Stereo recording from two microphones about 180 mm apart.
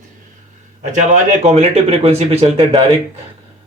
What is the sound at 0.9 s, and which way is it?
Speech, 40° right (ahead or behind).